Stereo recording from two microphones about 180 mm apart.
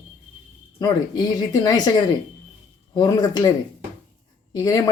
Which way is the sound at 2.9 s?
20° left (ahead or behind).